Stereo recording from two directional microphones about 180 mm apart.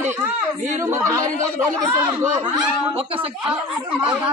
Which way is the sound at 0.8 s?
15° right (ahead or behind).